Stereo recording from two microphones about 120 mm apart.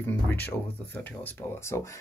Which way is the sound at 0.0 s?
15° left (ahead or behind).